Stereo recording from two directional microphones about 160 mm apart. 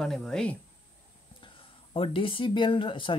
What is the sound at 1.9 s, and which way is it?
Speech, 35° left (ahead or behind).